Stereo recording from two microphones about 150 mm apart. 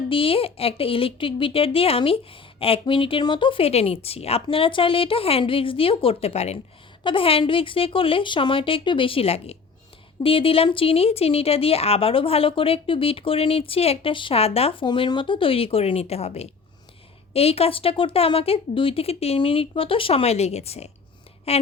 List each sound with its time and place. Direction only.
0.1 s a woman's voice: 35° left (ahead or behind)